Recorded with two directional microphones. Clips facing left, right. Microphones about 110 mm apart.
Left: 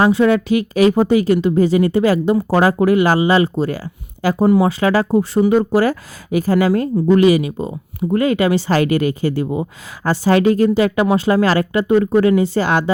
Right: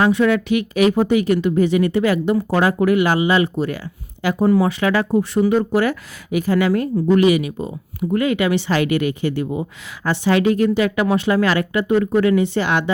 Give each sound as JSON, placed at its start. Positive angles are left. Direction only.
{"t": 0.0, "sound": "speech", "side_deg": 30}
{"t": 4.4, "sound": "speech", "side_deg": 25}